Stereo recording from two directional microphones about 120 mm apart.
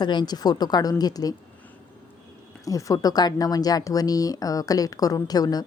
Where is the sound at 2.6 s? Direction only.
30° left (ahead or behind).